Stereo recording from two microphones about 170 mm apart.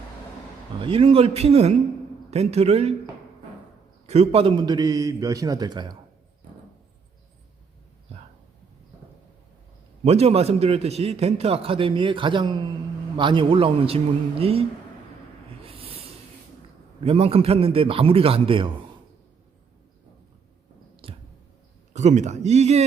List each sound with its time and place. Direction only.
0.8 s a man's voice: 30° right (ahead or behind)
4.0 s a man's voice: 40° right (ahead or behind)
10.0 s a man's voice: 35° right (ahead or behind)
15.6 s a sound: 35° right (ahead or behind)
17.0 s a man's voice: 35° right (ahead or behind)
20.9 s a sound: 30° right (ahead or behind)
21.9 s a man's voice: 45° right (ahead or behind)